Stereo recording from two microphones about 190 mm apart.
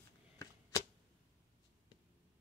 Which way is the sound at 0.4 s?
20° left (ahead or behind).